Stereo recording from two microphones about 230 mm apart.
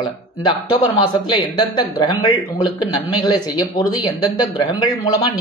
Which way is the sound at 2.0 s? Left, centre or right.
Centre.